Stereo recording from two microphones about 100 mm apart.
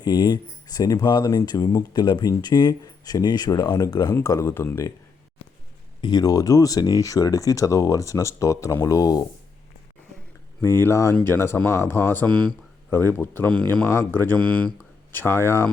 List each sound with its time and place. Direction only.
0.0 s speech: 45° left (ahead or behind)
1.5 s speech: 35° left (ahead or behind)
6.0 s speech: 45° left (ahead or behind)
10.6 s speech: 25° left (ahead or behind)
12.9 s speech: 25° left (ahead or behind)
14.3 s speech: 10° left (ahead or behind)
15.1 s speech: 25° left (ahead or behind)